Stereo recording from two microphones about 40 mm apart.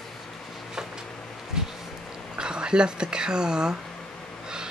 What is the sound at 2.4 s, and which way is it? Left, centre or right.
Speech, right.